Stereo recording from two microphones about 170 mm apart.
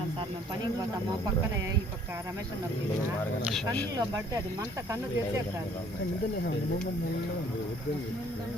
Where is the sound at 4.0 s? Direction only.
20° right (ahead or behind).